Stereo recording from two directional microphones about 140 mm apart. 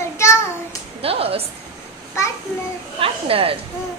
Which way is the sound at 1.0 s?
45° right (ahead or behind).